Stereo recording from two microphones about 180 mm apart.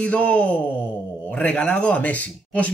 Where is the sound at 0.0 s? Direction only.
5° left (ahead or behind).